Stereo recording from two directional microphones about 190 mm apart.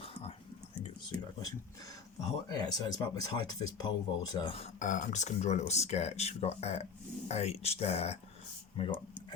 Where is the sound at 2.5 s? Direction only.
20° left (ahead or behind).